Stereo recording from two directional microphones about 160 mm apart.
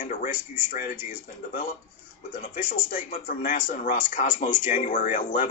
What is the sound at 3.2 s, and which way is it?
Speech, 65° left (ahead or behind).